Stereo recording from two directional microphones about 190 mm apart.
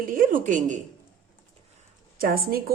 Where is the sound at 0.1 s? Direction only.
45° right (ahead or behind).